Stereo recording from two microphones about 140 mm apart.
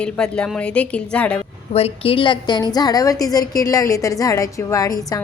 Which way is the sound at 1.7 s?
45° left (ahead or behind).